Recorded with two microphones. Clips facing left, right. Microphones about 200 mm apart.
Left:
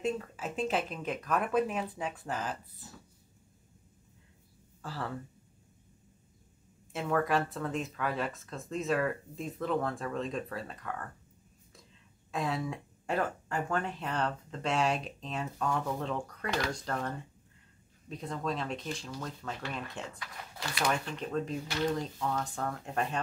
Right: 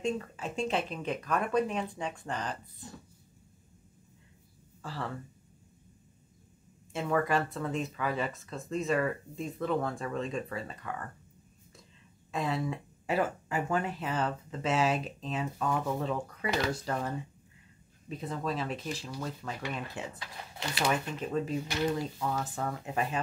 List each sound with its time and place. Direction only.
0.0 s speech: centre (ahead or behind)
4.8 s speech: centre (ahead or behind)
6.9 s speech: centre (ahead or behind)
12.3 s speech: centre (ahead or behind)
20.2 s speech: 25° right (ahead or behind)
21.2 s speech: 5° right (ahead or behind)